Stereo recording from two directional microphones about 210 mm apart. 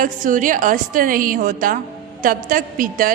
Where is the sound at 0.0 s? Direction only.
40° right (ahead or behind).